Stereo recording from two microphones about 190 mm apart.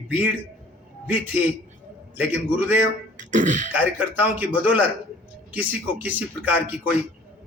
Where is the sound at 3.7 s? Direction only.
10° right (ahead or behind).